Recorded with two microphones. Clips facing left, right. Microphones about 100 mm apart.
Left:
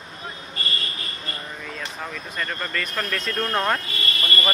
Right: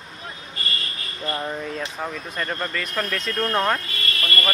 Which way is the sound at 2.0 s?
15° right (ahead or behind).